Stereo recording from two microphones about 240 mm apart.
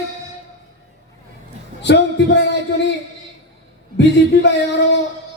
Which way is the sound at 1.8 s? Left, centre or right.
Left.